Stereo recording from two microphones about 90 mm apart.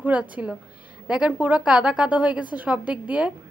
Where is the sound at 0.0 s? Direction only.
15° right (ahead or behind).